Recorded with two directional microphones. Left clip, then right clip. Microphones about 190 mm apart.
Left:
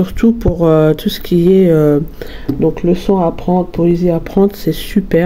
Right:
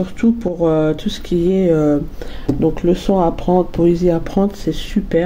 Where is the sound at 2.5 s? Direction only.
20° left (ahead or behind).